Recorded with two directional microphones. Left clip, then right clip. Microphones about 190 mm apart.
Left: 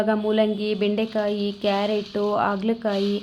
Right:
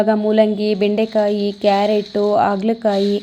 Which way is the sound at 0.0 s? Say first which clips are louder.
Right 7 dB; 20° right (ahead or behind).